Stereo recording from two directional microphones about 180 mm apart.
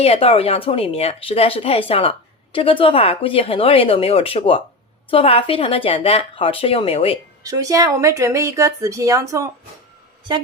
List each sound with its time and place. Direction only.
0.0 s speech: 30° left (ahead or behind)
7.4 s speech: 20° right (ahead or behind)